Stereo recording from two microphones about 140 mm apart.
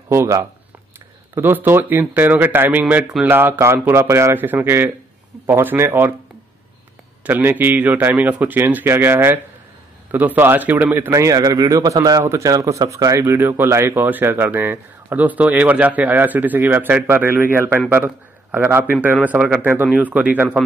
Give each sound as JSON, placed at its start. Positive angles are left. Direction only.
{"t": 0.1, "sound": "speech", "side_deg": -20}
{"t": 7.2, "sound": "speech", "side_deg": -15}